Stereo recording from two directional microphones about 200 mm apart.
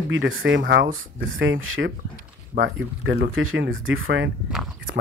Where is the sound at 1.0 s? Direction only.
75° right (ahead or behind).